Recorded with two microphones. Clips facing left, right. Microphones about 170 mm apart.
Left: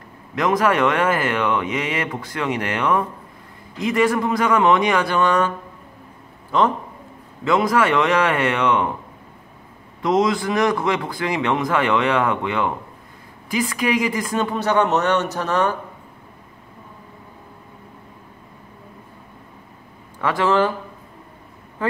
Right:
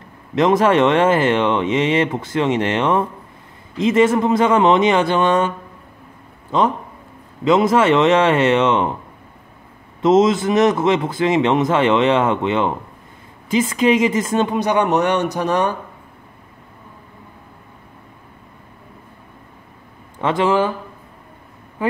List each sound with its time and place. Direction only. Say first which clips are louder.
0.4 s speech: right 4 dB; 25° right (ahead or behind)
6.5 s speech: right 1 dB; 20° right (ahead or behind)
10.0 s speech: right 5 dB; 25° right (ahead or behind)
20.2 s speech: right 2 dB; 20° right (ahead or behind)